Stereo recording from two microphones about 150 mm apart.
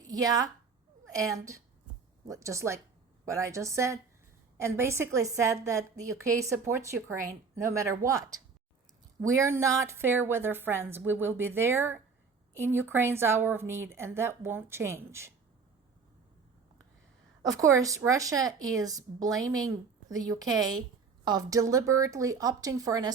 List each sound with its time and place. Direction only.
0.0 s a woman's voice: 25° right (ahead or behind)
17.6 s a woman's voice: 20° right (ahead or behind)